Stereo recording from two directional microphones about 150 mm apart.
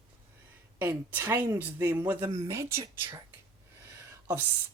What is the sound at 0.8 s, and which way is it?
Speech, 15° right (ahead or behind).